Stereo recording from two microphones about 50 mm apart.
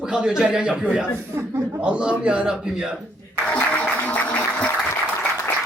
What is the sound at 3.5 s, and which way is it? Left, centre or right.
Music, left.